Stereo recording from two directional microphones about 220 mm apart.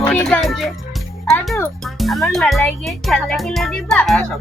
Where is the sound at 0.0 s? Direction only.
5° left (ahead or behind).